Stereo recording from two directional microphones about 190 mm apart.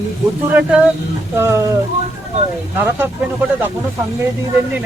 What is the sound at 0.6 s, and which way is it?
Speech, 5° right (ahead or behind).